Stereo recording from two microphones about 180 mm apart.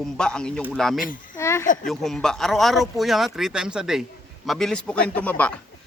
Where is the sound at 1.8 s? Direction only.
Centre (ahead or behind).